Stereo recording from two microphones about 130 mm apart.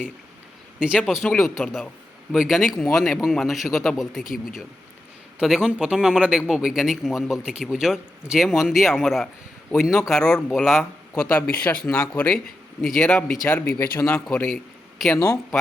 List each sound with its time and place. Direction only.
0.8 s a man's voice: 5° right (ahead or behind)
5.4 s a man's voice: 5° right (ahead or behind)
11.3 s a man's voice: 10° left (ahead or behind)
13.5 s speech: 20° left (ahead or behind)
14.3 s a man's voice: 5° left (ahead or behind)
15.1 s speech: 20° left (ahead or behind)